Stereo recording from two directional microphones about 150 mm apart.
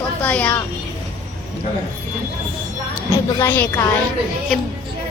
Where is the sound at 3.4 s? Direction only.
15° left (ahead or behind).